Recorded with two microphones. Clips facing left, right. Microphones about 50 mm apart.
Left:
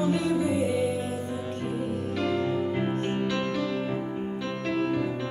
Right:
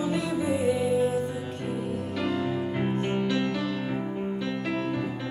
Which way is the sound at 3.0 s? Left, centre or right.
Centre.